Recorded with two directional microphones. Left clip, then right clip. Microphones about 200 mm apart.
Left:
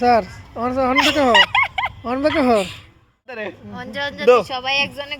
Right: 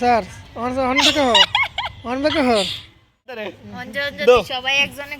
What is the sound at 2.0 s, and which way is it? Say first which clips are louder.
Speech: even; 15° left (ahead or behind).